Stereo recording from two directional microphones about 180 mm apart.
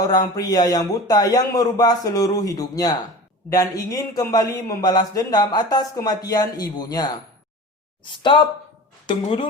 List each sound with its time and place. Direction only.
0.0 s a man's voice: 20° left (ahead or behind)
9.0 s a man's voice: 30° left (ahead or behind)